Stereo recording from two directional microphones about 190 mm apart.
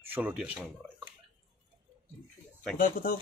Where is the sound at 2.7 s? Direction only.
45° left (ahead or behind).